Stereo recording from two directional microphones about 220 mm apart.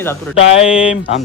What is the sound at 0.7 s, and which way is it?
Speech, 5° right (ahead or behind).